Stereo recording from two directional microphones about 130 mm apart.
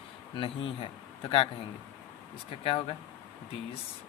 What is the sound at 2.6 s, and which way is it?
Speech, 45° left (ahead or behind).